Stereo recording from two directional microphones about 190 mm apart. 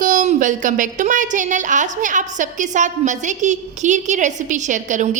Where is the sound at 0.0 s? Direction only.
40° right (ahead or behind).